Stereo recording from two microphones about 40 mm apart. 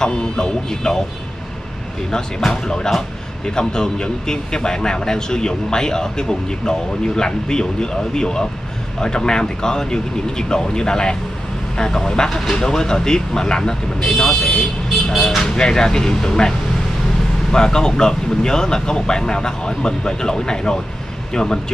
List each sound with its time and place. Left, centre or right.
0.0 s speech: centre
2.4 s speech: centre